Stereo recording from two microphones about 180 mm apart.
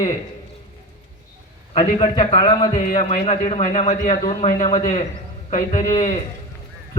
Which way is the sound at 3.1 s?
40° left (ahead or behind).